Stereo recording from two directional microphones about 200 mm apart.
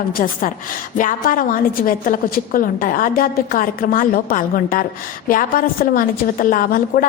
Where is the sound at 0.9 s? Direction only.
40° left (ahead or behind).